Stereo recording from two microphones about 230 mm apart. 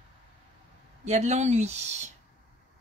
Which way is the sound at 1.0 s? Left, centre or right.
Right.